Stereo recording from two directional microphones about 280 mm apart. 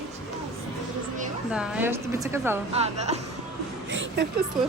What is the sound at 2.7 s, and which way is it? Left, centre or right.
Speech, right.